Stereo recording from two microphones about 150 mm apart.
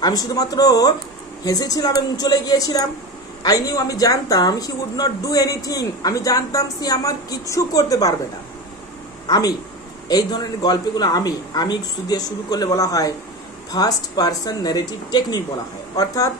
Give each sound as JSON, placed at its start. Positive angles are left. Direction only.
{"t": 0.0, "sound": "speech", "side_deg": 25}
{"t": 9.3, "sound": "speech", "side_deg": 25}